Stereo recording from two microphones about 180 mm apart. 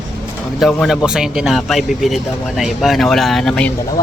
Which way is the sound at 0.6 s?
Centre (ahead or behind).